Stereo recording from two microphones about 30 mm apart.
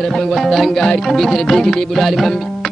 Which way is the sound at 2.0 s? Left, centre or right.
Centre.